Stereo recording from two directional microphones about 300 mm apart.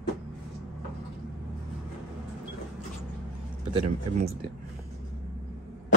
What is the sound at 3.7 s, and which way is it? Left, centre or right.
Speech, right.